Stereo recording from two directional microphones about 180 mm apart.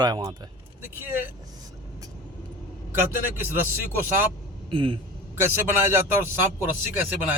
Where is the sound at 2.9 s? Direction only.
10° right (ahead or behind).